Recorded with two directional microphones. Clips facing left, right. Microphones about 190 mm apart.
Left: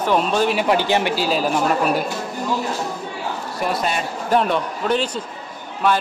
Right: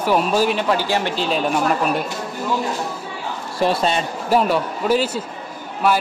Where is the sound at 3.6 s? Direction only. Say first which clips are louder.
Right 5 dB; 30° right (ahead or behind).